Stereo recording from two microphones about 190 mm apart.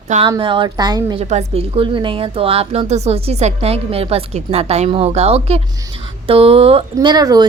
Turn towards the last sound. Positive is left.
turn(degrees=-20)  # may be behind; listen again after turning